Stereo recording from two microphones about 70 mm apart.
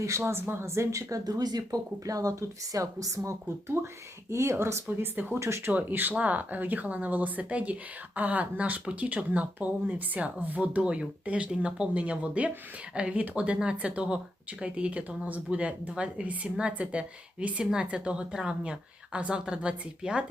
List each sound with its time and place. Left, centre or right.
0.0 s a woman's voice: right
1.2 s speech: right
3.7 s a woman's voice: right
5.4 s a woman's voice: right
5.7 s a woman's voice: right